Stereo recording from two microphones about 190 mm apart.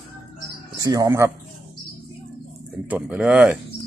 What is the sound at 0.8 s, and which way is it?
Speech, 20° right (ahead or behind).